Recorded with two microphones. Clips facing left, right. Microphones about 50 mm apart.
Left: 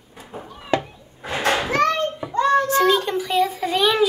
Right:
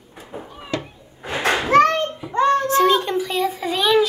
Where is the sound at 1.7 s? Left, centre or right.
Right.